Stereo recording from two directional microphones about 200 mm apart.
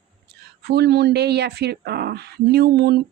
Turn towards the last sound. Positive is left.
turn(degrees=-55)  # may be behind; listen again after turning